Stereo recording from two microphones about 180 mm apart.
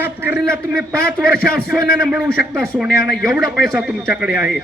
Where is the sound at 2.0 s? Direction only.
5° right (ahead or behind).